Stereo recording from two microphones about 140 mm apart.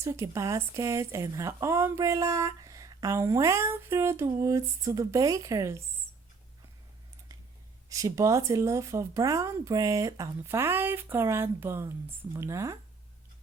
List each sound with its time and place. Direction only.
0.0 s speech: 20° right (ahead or behind)
7.9 s speech: 25° right (ahead or behind)